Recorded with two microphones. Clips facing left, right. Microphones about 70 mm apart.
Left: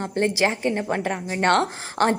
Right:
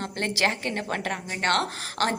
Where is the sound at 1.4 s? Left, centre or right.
Left.